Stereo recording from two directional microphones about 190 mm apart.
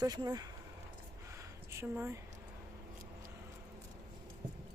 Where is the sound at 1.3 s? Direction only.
15° right (ahead or behind).